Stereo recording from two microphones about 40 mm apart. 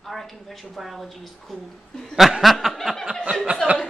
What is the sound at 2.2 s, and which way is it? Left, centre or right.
Chuckle, centre.